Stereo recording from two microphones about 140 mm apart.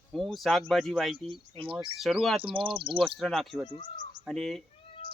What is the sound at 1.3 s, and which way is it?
Speech, 40° right (ahead or behind).